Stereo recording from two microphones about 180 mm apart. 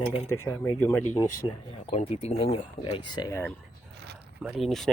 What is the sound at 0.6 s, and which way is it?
Speech, 15° left (ahead or behind).